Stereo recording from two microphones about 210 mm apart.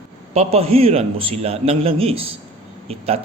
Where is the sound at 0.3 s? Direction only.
30° right (ahead or behind).